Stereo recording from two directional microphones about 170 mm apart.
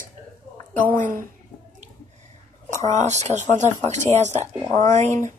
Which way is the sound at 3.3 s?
20° left (ahead or behind).